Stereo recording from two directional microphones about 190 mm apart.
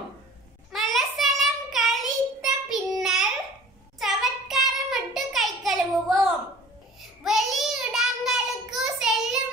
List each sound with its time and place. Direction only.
0.7 s child singing: centre (ahead or behind)